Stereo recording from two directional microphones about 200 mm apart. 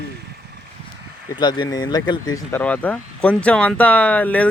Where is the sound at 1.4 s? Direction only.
20° left (ahead or behind).